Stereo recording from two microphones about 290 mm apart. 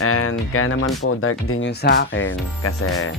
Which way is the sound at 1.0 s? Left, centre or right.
Left.